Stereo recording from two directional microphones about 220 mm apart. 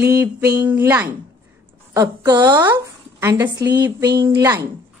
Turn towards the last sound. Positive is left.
turn(degrees=-15)  # may be behind; listen again after turning